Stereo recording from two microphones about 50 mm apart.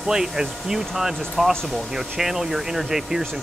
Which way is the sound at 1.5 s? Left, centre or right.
Centre.